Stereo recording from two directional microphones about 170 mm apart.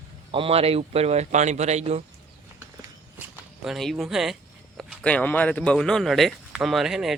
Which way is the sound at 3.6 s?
Centre (ahead or behind).